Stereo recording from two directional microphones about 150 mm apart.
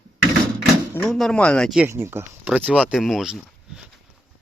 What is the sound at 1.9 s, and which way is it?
Speech, 15° right (ahead or behind).